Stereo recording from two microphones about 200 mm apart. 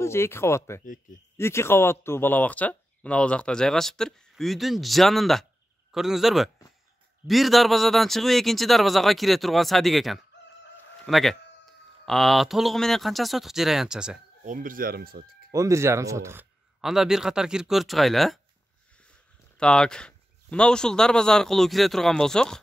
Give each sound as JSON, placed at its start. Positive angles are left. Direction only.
{"t": 0.0, "sound": "speech", "side_deg": 10}
{"t": 14.4, "sound": "speech", "side_deg": -40}
{"t": 15.5, "sound": "speech", "side_deg": -15}
{"t": 16.8, "sound": "speech", "side_deg": 0}
{"t": 19.6, "sound": "speech", "side_deg": 5}